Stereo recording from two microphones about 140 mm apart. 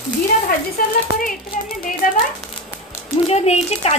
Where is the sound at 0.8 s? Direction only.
90° left.